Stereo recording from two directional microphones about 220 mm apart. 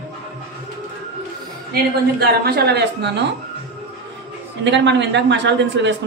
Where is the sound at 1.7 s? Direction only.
45° right (ahead or behind).